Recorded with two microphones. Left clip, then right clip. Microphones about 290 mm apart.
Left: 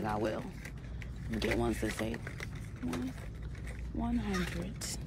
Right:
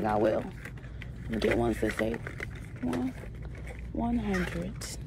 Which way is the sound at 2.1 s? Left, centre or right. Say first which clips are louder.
Right 6 dB; centre.